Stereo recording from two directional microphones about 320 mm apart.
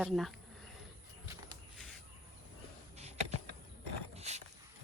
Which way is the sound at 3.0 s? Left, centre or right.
Centre.